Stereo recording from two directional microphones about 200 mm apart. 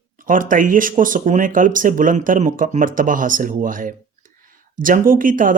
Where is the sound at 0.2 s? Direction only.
40° right (ahead or behind).